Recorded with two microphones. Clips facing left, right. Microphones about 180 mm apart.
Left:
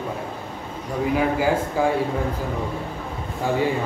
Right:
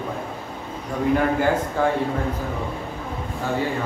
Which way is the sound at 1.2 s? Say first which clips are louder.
Even; 5° left (ahead or behind).